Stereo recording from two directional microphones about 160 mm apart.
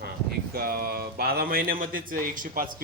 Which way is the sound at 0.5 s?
70° right (ahead or behind).